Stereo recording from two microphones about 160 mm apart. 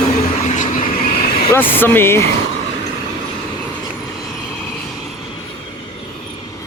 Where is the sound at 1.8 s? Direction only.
15° left (ahead or behind).